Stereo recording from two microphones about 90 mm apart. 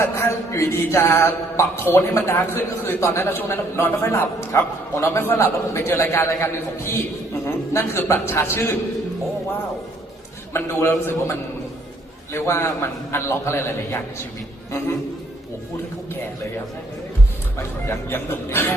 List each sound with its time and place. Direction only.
0.0 s speech: 30° left (ahead or behind)
10.5 s speech: 30° left (ahead or behind)
17.6 s speech: 30° left (ahead or behind)